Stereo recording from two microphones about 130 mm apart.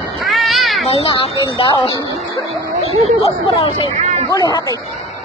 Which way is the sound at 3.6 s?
45° left (ahead or behind).